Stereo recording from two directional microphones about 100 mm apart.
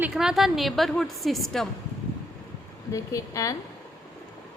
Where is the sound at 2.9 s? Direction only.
35° left (ahead or behind).